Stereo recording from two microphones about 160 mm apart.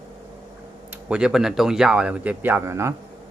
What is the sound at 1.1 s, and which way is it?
Speech, 5° right (ahead or behind).